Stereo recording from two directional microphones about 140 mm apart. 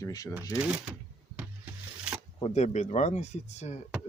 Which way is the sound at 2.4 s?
50° left (ahead or behind).